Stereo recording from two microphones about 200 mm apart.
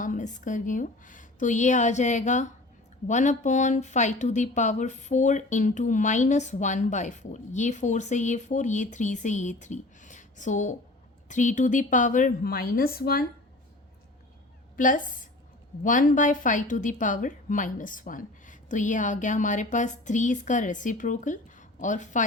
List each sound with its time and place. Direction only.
0.0 s speech: 40° left (ahead or behind)
14.8 s speech: 40° left (ahead or behind)